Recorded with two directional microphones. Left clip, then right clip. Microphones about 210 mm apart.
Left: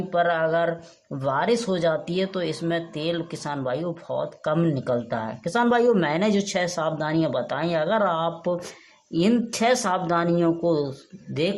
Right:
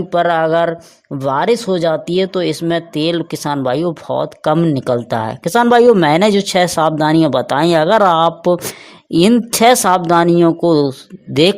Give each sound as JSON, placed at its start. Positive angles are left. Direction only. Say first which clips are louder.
{"t": 0.1, "sound": "speech", "louder": "right 9 dB", "side_deg": -40}